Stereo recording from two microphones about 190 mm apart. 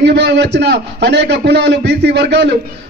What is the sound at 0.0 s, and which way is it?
A man's voice, 65° right (ahead or behind).